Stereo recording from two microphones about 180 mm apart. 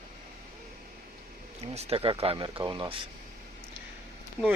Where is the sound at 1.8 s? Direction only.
35° right (ahead or behind).